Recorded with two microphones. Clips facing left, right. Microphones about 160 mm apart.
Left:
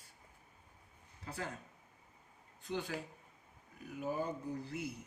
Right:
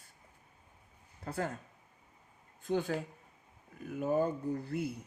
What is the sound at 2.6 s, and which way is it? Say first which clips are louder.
Speech: right 7 dB; 50° right (ahead or behind).